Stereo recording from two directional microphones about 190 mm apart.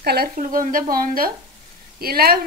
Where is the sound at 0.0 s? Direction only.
55° right (ahead or behind).